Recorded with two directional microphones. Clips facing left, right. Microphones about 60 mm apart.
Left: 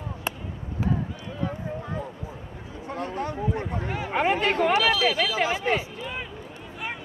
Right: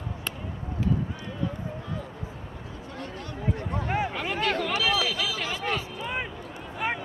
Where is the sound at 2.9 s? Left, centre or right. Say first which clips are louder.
Left 9 dB; left.